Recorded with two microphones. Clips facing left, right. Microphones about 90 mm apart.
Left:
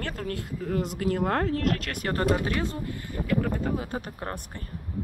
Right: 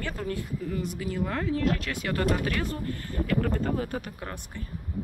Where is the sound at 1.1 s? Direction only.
55° left (ahead or behind).